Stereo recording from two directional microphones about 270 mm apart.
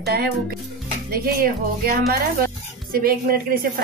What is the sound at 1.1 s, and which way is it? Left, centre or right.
A woman's voice, right.